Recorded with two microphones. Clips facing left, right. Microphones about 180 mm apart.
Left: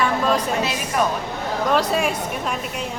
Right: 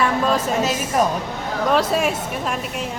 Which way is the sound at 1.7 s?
Centre (ahead or behind).